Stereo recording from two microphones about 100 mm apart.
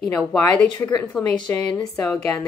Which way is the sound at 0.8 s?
35° left (ahead or behind).